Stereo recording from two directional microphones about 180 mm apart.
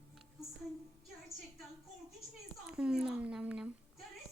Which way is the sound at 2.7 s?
5° right (ahead or behind).